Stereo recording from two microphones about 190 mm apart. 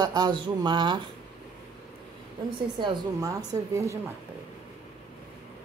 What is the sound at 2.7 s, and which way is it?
Speech, 20° right (ahead or behind).